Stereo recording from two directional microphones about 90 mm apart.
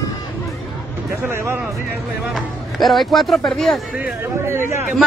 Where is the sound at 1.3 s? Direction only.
30° right (ahead or behind).